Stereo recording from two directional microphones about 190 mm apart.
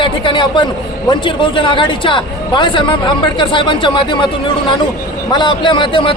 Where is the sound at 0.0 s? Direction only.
25° left (ahead or behind).